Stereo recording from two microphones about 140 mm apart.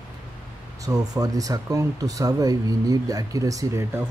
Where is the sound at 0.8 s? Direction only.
25° right (ahead or behind).